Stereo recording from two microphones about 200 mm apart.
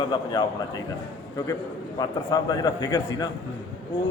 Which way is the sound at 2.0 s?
20° left (ahead or behind).